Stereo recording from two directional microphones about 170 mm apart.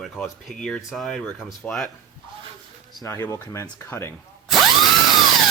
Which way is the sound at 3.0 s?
15° left (ahead or behind).